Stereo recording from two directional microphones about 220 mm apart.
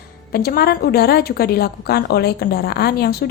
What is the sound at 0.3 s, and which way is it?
A woman's voice, 45° left (ahead or behind).